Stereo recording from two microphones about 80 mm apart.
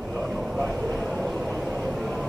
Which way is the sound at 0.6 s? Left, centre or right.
Centre.